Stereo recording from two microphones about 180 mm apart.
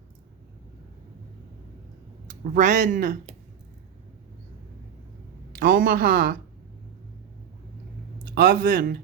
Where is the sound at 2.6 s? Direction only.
45° right (ahead or behind).